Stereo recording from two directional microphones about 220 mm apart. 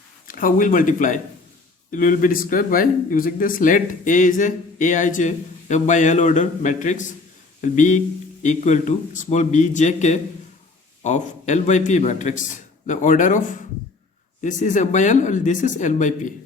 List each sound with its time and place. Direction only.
0.3 s speech: 40° left (ahead or behind)